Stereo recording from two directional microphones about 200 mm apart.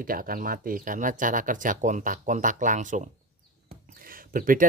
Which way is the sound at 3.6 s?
45° right (ahead or behind).